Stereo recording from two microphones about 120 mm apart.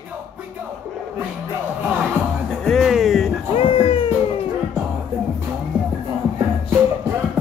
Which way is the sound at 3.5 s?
50° left (ahead or behind).